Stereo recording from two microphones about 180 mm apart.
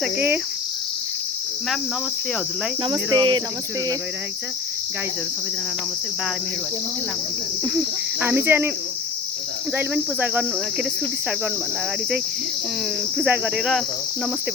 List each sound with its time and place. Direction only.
0.0 s cricket: 10° right (ahead or behind)
2.9 s cricket: 20° right (ahead or behind)
7.6 s cricket: 15° right (ahead or behind)
9.7 s cricket: 10° right (ahead or behind)
13.1 s speech: 10° right (ahead or behind)